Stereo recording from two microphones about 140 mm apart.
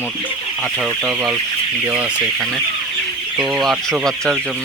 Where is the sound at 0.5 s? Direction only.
5° right (ahead or behind).